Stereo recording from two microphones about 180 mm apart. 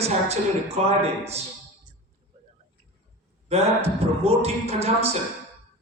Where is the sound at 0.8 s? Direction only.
35° right (ahead or behind).